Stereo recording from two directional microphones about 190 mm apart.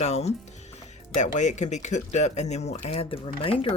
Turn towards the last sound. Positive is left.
turn(degrees=30)  # may be behind; listen again after turning